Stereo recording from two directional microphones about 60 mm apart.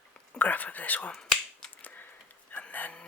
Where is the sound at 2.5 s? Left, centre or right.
Left.